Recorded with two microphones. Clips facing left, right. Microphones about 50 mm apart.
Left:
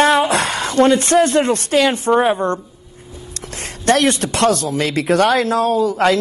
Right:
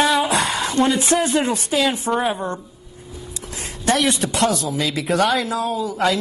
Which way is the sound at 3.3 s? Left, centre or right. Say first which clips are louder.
Left 3 dB; left.